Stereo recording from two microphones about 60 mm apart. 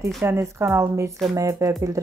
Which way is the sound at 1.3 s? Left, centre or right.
Right.